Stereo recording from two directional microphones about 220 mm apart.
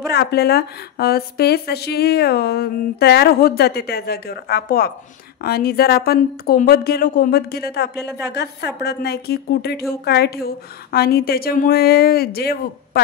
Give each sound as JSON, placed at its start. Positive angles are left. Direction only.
{"t": 0.1, "sound": "a woman's voice", "side_deg": 50}